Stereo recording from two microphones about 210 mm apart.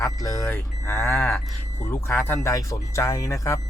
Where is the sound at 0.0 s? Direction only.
15° left (ahead or behind).